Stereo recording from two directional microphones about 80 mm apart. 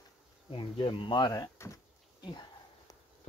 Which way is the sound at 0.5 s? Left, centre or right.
Left.